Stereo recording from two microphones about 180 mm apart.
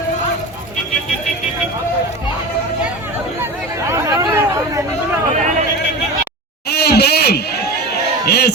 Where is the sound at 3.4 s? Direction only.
15° right (ahead or behind).